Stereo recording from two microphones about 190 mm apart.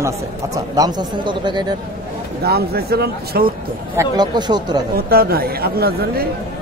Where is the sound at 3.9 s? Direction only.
20° right (ahead or behind).